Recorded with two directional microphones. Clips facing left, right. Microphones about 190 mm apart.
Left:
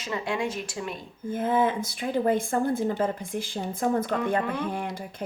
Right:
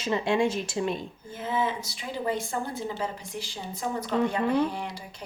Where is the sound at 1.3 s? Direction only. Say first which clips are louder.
Left 5 dB; 50° left (ahead or behind).